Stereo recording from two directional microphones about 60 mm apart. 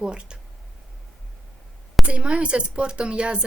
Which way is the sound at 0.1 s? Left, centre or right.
Centre.